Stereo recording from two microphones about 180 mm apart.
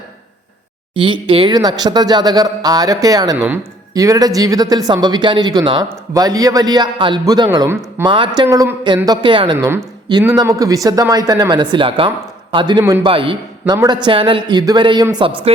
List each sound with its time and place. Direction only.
0.9 s speech: 30° right (ahead or behind)
8.0 s speech: 25° right (ahead or behind)